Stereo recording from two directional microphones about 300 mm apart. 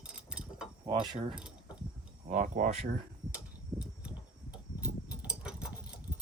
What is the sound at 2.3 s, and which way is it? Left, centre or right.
Speech, right.